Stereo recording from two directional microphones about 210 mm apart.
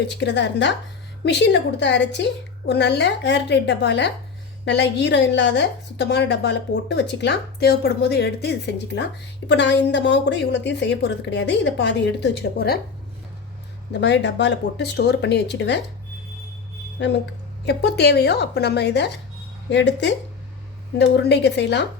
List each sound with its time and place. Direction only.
0.2 s a woman's voice: 55° left (ahead or behind)
13.9 s a woman's voice: 55° left (ahead or behind)
17.7 s a woman's voice: 50° left (ahead or behind)